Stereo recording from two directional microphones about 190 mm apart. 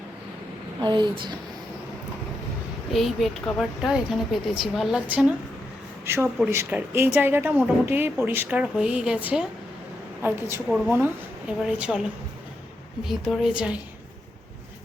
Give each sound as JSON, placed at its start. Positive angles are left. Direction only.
{"t": 0.8, "sound": "a woman's voice", "side_deg": -25}
{"t": 2.9, "sound": "speech", "side_deg": 0}
{"t": 13.1, "sound": "speech", "side_deg": 0}